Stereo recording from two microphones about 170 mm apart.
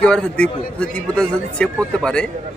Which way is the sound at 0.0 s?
5° left (ahead or behind).